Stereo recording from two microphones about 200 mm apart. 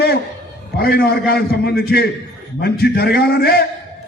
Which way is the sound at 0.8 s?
50° left (ahead or behind).